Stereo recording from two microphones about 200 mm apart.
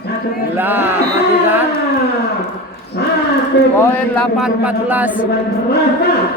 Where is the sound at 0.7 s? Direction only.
10° right (ahead or behind).